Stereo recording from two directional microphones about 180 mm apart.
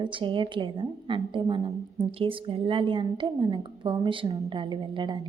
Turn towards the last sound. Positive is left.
turn(degrees=-25)  # may be behind; listen again after turning